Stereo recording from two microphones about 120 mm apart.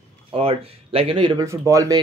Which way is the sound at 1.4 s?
25° right (ahead or behind).